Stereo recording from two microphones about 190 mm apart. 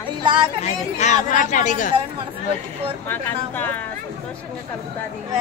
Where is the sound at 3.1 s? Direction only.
10° left (ahead or behind).